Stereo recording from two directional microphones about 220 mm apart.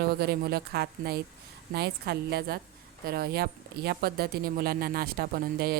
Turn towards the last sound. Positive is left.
turn(degrees=-45)  # may be behind; listen again after turning